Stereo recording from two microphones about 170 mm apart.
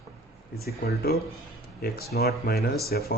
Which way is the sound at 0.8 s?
65° left (ahead or behind).